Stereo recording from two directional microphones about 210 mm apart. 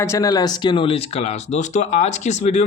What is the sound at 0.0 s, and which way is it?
Speech, 15° left (ahead or behind).